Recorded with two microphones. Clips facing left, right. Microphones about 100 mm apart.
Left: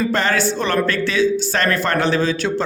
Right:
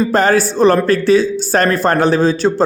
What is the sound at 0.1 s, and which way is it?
Speech, 45° right (ahead or behind).